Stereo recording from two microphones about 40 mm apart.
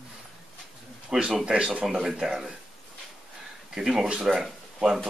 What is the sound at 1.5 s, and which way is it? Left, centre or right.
Speech, centre.